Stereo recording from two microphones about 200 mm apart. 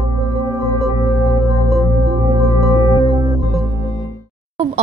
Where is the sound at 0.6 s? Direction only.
15° right (ahead or behind).